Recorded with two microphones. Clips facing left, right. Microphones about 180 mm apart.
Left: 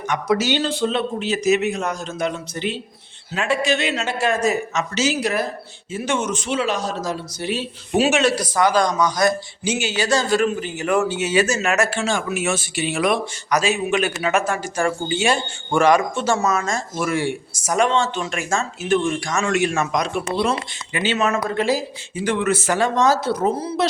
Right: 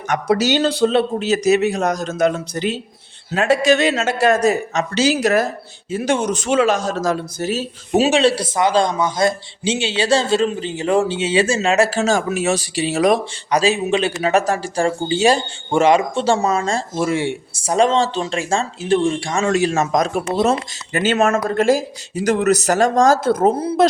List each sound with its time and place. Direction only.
0.1 s a man's voice: 35° right (ahead or behind)
15.7 s speech: 25° right (ahead or behind); by 23.8 s 55° right (ahead or behind)